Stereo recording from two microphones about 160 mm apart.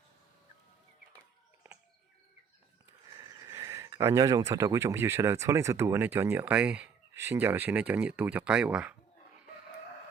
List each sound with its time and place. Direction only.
3.2 s speech: 20° right (ahead or behind); by 9.0 s 5° right (ahead or behind)